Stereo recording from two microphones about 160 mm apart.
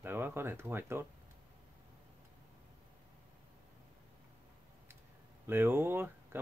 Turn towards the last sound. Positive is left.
turn(degrees=-15)  # may be behind; listen again after turning